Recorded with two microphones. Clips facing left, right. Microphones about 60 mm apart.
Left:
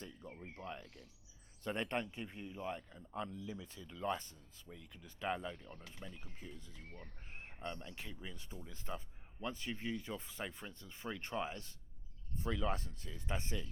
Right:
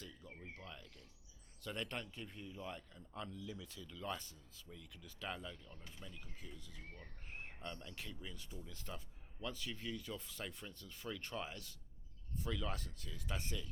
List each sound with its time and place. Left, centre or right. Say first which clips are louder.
0.0 s a sound: left 4 dB; left
0.3 s speech: left 7 dB; left
4.7 s speech: left 2 dB; left
7.6 s speech: left 5 dB; left